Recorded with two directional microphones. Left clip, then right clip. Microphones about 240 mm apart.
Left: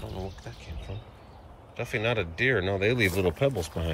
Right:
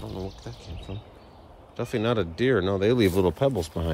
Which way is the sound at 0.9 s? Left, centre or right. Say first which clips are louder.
Right 3 dB; right.